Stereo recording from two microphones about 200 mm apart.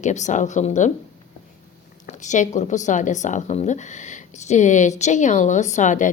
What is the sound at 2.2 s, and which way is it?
Speech, 35° left (ahead or behind).